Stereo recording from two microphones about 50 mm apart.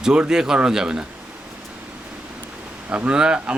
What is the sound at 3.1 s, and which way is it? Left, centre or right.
Speech, centre.